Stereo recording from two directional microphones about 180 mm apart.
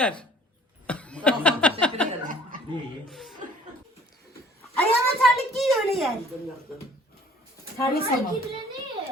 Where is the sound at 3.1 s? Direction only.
Centre (ahead or behind).